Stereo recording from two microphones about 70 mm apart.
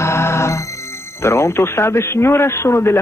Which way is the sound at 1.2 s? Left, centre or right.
Left.